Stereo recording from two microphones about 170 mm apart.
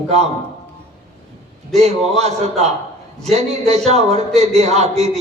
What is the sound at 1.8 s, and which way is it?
A man's voice, 40° right (ahead or behind).